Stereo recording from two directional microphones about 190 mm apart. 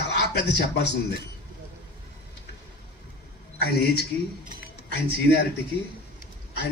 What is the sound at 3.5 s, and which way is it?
Speech, 55° left (ahead or behind).